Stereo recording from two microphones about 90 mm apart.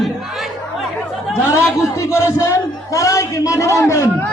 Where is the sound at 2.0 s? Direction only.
35° left (ahead or behind).